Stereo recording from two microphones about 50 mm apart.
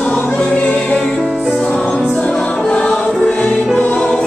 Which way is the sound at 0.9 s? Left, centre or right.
Centre.